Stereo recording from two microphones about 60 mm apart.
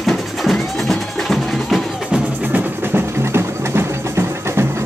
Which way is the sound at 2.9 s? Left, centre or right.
Right.